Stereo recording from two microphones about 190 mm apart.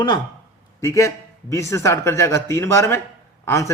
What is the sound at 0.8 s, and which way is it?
A man's voice, 15° left (ahead or behind).